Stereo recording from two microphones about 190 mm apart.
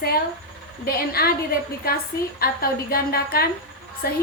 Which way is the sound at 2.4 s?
50° left (ahead or behind).